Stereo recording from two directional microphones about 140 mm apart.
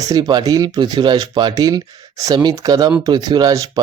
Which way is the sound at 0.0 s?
25° right (ahead or behind).